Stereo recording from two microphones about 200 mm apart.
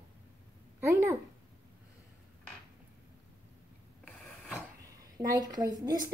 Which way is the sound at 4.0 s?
Centre (ahead or behind).